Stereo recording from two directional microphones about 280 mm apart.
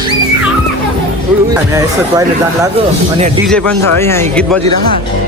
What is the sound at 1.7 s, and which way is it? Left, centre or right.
Speech, centre.